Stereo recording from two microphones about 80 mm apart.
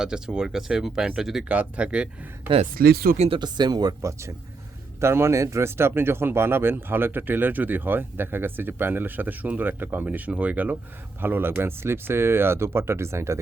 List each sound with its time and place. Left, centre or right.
0.0 s speech: centre
3.3 s speech: right
4.0 s speech: right